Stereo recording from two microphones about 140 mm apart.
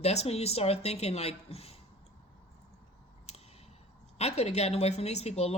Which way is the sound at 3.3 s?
50° left (ahead or behind).